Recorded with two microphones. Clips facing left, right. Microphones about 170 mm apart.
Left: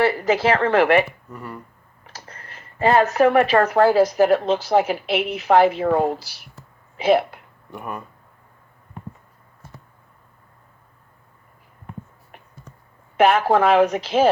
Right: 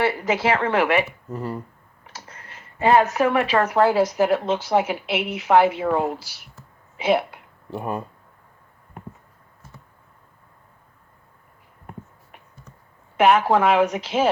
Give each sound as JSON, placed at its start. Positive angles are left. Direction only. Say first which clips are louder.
{"t": 0.0, "sound": "a woman's voice", "louder": "left 3 dB", "side_deg": 40}
{"t": 1.3, "sound": "speech", "louder": "right 6 dB", "side_deg": -30}
{"t": 2.1, "sound": "a sound", "louder": "left 1 dB", "side_deg": 35}
{"t": 3.6, "sound": "a woman's voice", "louder": "left 3 dB", "side_deg": 35}
{"t": 7.7, "sound": "speech", "louder": "right 4 dB", "side_deg": -30}
{"t": 13.1, "sound": "a woman's voice", "louder": "left 1 dB", "side_deg": 40}